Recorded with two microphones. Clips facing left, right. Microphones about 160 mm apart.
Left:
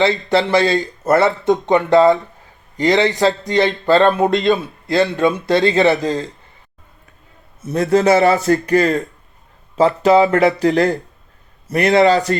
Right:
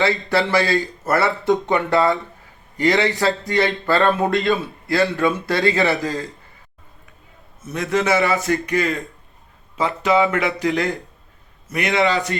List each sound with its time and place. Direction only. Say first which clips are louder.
0.0 s speech: left 4 dB; 20° left (ahead or behind)
7.6 s a man's voice: left 7 dB; 35° left (ahead or behind)